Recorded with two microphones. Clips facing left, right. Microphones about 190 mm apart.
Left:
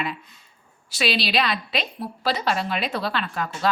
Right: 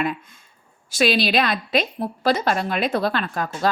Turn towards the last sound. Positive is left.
turn(degrees=-45)  # may be behind; listen again after turning